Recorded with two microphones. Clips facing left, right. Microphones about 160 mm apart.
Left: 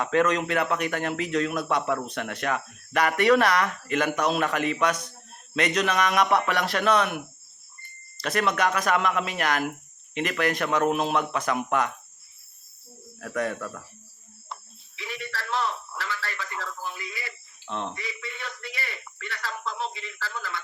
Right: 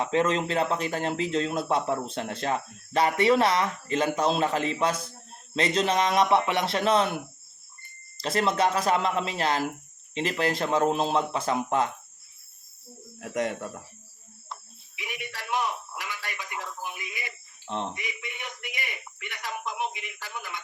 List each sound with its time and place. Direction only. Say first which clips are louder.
0.0 s speech: left 1 dB; 25° right (ahead or behind)
8.2 s speech: even; 25° right (ahead or behind)
13.1 s speech: even; 20° right (ahead or behind)
14.5 s cricket: left 1 dB; centre (ahead or behind)
14.9 s a sound: left 3 dB; 15° right (ahead or behind)